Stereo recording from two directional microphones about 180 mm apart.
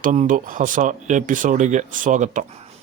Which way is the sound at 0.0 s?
45° right (ahead or behind).